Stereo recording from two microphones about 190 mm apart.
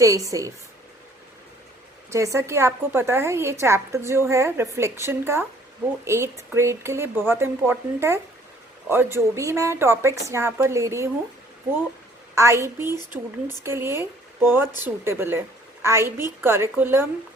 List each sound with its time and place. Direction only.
0.0 s a woman's voice: 15° right (ahead or behind)
2.0 s a woman's voice: 15° right (ahead or behind)